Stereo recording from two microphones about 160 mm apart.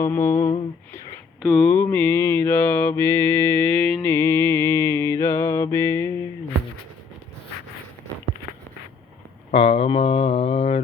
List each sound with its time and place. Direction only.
0.0 s mantra: 15° left (ahead or behind)
1.5 s mantra: 10° left (ahead or behind)
4.1 s mantra: 15° left (ahead or behind)
9.5 s speech: 35° left (ahead or behind)